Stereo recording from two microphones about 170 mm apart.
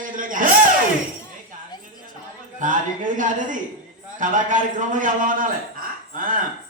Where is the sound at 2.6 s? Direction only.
50° right (ahead or behind).